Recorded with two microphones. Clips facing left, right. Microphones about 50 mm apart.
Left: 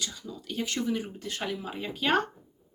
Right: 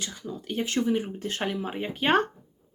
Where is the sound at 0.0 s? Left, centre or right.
Right.